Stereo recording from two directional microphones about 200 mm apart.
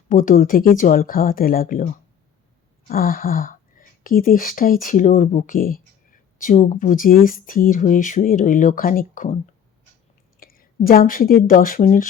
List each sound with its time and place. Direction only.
0.1 s speech: 40° left (ahead or behind)
2.9 s speech: 45° left (ahead or behind)
10.4 s a woman's voice: 45° left (ahead or behind)